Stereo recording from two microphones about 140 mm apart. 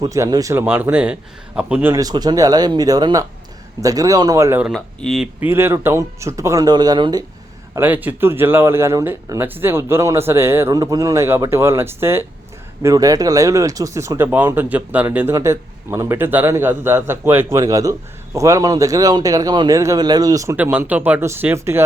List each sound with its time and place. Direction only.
0.0 s speech: 25° right (ahead or behind)
0.6 s speech: 10° right (ahead or behind)
1.9 s speech: 25° right (ahead or behind)
4.6 s speech: centre (ahead or behind)
5.5 s speech: 15° right (ahead or behind)
7.8 s speech: 15° right (ahead or behind)
20.6 s speech: 15° right (ahead or behind)